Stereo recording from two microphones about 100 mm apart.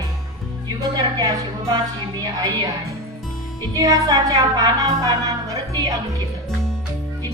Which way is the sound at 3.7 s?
40° right (ahead or behind).